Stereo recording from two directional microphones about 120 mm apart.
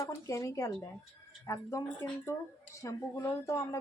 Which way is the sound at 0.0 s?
25° left (ahead or behind).